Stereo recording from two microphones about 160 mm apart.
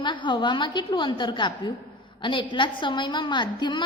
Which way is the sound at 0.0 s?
30° left (ahead or behind).